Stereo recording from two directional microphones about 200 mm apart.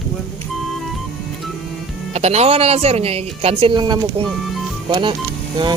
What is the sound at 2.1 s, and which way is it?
Speech, 35° right (ahead or behind).